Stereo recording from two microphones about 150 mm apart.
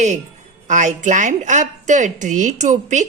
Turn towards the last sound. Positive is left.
turn(degrees=-50)  # may be behind; listen again after turning